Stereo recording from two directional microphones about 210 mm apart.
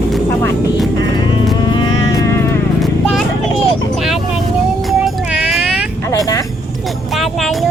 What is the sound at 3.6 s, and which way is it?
Vehicle, centre (ahead or behind).